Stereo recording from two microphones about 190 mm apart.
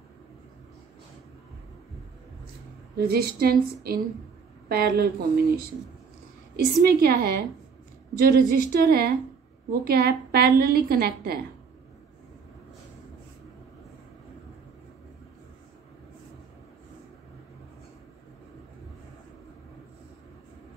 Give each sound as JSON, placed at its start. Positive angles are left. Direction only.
{"t": 3.1, "sound": "a woman's voice", "side_deg": -50}
{"t": 6.5, "sound": "a woman's voice", "side_deg": -55}